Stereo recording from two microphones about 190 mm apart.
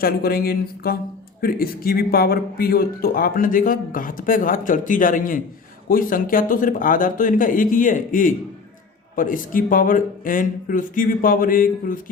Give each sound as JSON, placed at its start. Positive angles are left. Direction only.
{"t": 0.0, "sound": "speech", "side_deg": 50}